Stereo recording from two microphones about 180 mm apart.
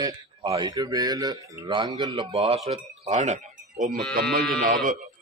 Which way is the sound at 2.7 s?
40° right (ahead or behind).